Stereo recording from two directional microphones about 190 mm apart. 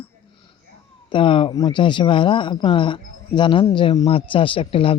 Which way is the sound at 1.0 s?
25° left (ahead or behind).